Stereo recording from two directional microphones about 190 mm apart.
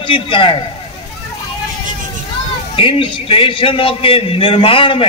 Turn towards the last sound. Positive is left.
turn(degrees=30)  # may be behind; listen again after turning